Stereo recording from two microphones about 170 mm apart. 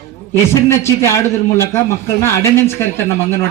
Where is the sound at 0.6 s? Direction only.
15° left (ahead or behind).